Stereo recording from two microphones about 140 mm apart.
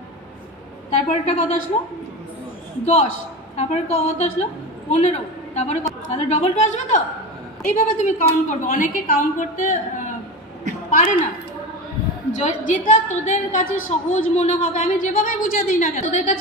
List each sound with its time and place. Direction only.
1.1 s a woman's voice: 55° left (ahead or behind)
2.8 s a woman's voice: 55° left (ahead or behind)
7.6 s a woman's voice: 70° left (ahead or behind)
10.9 s a sound: 75° left (ahead or behind)
12.3 s a woman's voice: 65° left (ahead or behind)